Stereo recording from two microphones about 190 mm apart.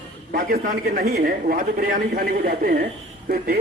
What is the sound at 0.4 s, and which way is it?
A man's voice, 55° right (ahead or behind).